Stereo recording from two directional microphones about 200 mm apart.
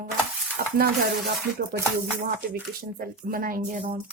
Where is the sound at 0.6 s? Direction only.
45° right (ahead or behind).